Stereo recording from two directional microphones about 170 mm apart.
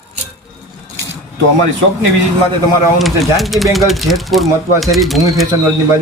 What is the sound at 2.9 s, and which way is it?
Speech, centre (ahead or behind).